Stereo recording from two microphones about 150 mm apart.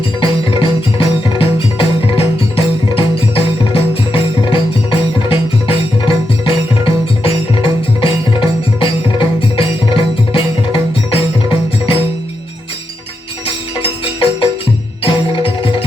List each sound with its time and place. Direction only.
0.2 s music: 35° left (ahead or behind)
13.7 s music: 35° left (ahead or behind)